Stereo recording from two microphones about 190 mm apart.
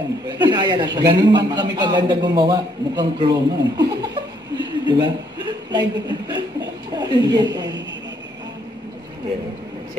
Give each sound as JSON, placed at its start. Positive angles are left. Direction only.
{"t": 0.5, "sound": "a man's voice", "side_deg": -25}